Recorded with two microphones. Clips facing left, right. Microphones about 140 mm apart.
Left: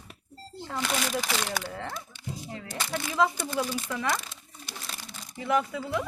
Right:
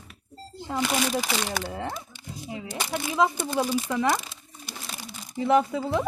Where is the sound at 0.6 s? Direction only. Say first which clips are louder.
Right 5 dB; 10° right (ahead or behind).